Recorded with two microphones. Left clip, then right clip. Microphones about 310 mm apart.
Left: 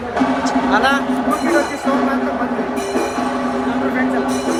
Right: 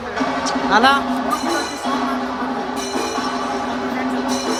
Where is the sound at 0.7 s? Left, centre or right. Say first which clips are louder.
Right 2 dB; right.